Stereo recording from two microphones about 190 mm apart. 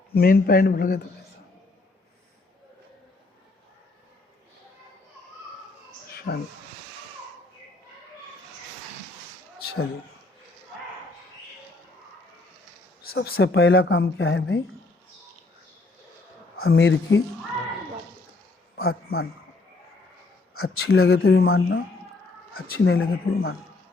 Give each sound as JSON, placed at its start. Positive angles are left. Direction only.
{"t": 0.1, "sound": "speech", "side_deg": 55}
{"t": 6.1, "sound": "a sound", "side_deg": 55}
{"t": 13.0, "sound": "speech", "side_deg": 55}
{"t": 16.6, "sound": "speech", "side_deg": 75}
{"t": 18.8, "sound": "speech", "side_deg": 55}
{"t": 20.6, "sound": "speech", "side_deg": 90}
{"t": 22.6, "sound": "speech", "side_deg": 55}
{"t": 22.9, "sound": "speech", "side_deg": 90}